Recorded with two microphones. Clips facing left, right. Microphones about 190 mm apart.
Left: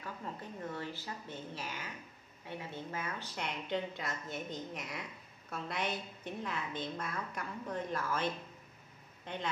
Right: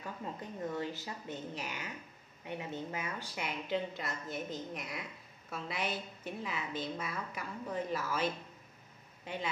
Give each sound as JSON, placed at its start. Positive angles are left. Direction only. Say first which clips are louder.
{"t": 0.0, "sound": "a woman's voice", "louder": "right 2 dB", "side_deg": -15}